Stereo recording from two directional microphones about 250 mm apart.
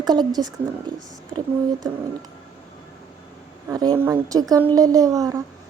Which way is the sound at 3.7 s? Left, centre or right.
Centre.